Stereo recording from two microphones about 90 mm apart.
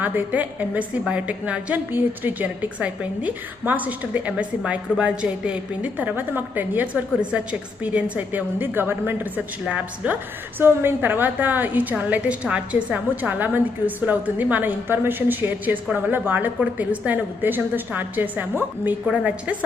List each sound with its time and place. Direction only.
0.0 s a woman's voice: 20° right (ahead or behind)